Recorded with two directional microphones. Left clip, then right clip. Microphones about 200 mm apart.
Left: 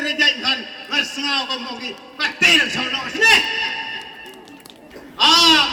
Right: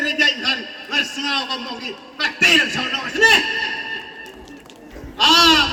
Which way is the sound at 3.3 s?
30° left (ahead or behind).